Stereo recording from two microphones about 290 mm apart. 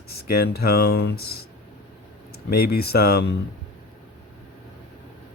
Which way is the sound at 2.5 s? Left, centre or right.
Left.